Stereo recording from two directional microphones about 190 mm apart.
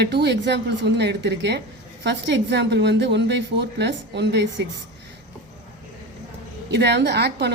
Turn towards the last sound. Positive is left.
turn(degrees=-60)  # may be behind; listen again after turning